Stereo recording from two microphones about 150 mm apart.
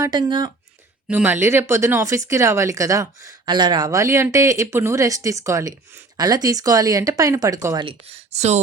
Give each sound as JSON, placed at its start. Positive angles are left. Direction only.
{"t": 0.0, "sound": "speech", "side_deg": -30}
{"t": 1.1, "sound": "speech", "side_deg": -10}
{"t": 7.9, "sound": "speech", "side_deg": -45}